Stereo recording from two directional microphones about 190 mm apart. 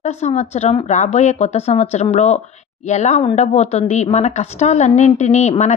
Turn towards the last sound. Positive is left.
turn(degrees=35)  # may be behind; listen again after turning